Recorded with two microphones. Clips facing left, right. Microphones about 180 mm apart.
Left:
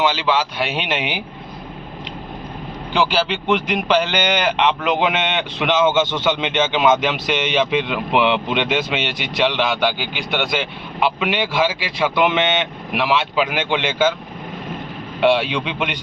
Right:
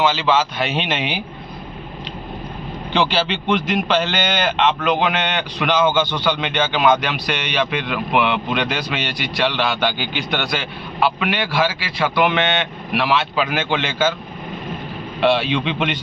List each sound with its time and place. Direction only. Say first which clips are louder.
0.0 s a man's voice: right 1 dB; 15° left (ahead or behind)
2.9 s a man's voice: even; 10° left (ahead or behind)
15.2 s a man's voice: left 1 dB; 15° left (ahead or behind)